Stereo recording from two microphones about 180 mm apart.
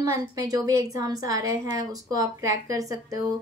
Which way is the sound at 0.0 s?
20° right (ahead or behind).